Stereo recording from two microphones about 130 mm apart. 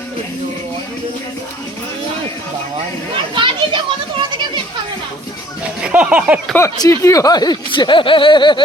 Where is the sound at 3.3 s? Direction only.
40° right (ahead or behind).